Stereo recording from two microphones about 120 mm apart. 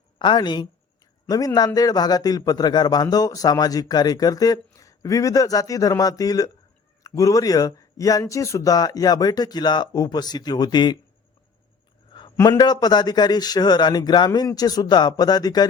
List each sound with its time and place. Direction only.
0.2 s a man's voice: 40° left (ahead or behind)
12.4 s a man's voice: 35° left (ahead or behind)